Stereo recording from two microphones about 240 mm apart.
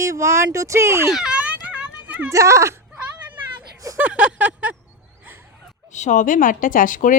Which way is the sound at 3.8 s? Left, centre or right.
Centre.